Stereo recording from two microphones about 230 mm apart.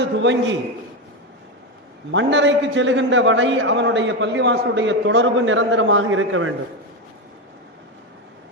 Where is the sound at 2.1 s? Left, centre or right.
Right.